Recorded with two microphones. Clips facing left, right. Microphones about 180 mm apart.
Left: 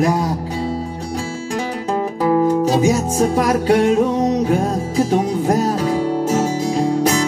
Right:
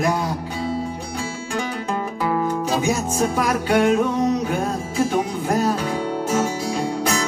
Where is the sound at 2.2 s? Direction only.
40° left (ahead or behind).